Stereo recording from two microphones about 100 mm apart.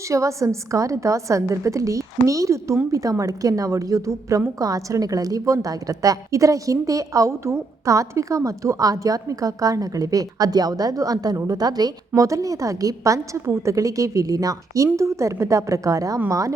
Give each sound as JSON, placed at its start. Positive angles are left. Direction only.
{"t": 0.1, "sound": "a woman's voice", "side_deg": -30}